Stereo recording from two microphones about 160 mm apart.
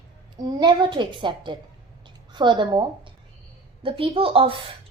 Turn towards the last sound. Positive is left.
turn(degrees=-35)  # may be behind; listen again after turning